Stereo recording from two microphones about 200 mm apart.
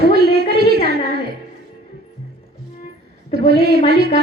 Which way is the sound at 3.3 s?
50° right (ahead or behind).